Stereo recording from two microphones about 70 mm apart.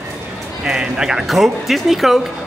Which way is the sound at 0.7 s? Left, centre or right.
Centre.